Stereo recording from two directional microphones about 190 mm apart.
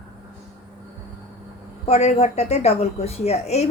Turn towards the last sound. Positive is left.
turn(degrees=35)  # may be behind; listen again after turning